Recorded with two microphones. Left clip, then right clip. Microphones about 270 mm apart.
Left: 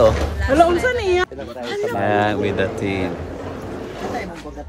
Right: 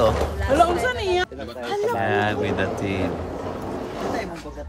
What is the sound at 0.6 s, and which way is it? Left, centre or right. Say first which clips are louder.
Speech: left 5 dB; left.